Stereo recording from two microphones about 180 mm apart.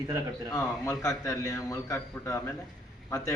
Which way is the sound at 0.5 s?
15° left (ahead or behind).